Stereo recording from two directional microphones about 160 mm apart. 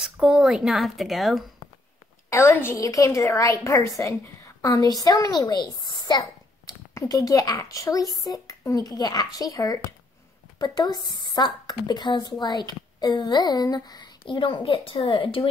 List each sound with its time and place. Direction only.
0.0 s a woman's voice: 5° right (ahead or behind)
2.2 s a woman's voice: 15° left (ahead or behind); by 15.4 s 30° left (ahead or behind)